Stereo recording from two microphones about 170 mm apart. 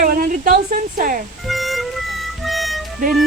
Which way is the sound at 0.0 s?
55° right (ahead or behind).